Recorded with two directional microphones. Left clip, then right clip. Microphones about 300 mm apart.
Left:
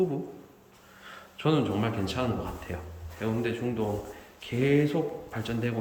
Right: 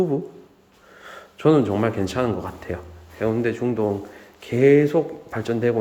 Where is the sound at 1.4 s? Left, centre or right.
Centre.